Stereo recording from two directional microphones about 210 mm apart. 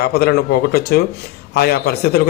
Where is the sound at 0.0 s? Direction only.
50° left (ahead or behind).